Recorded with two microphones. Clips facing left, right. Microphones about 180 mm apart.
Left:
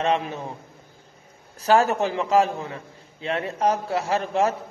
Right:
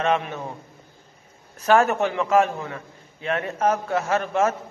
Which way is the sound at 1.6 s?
35° left (ahead or behind).